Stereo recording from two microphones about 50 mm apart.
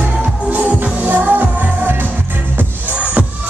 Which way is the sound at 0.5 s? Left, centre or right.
Right.